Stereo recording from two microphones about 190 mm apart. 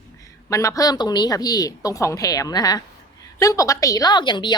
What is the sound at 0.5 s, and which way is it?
A woman's voice, 15° left (ahead or behind).